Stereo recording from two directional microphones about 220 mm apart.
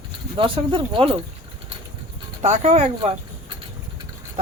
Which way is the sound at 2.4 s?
30° right (ahead or behind).